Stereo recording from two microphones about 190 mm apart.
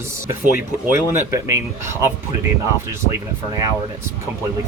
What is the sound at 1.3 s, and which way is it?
Speech, 15° right (ahead or behind).